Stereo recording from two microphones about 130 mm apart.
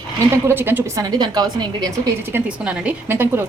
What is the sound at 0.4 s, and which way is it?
A woman's voice, 15° right (ahead or behind).